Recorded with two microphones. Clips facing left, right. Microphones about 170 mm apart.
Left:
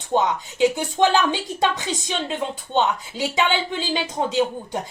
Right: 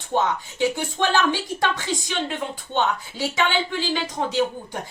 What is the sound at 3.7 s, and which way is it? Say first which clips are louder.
Speech: even; 20° left (ahead or behind).